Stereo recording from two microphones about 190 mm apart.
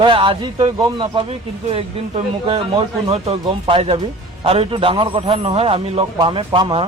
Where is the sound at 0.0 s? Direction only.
25° right (ahead or behind).